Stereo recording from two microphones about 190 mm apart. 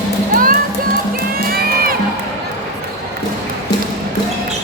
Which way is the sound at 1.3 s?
50° right (ahead or behind).